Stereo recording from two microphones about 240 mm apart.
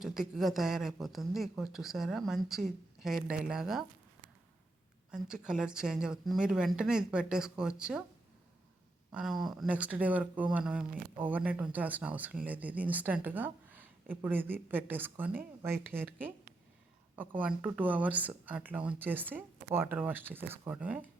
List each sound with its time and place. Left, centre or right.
0.0 s speech: centre
5.1 s speech: centre
9.1 s speech: centre
17.2 s speech: centre